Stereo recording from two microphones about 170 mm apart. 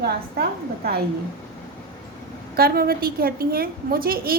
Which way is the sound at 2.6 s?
65° right (ahead or behind).